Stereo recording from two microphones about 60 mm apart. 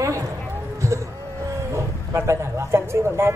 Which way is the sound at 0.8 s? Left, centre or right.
Right.